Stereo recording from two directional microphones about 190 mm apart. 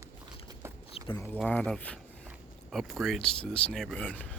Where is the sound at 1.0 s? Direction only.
30° left (ahead or behind).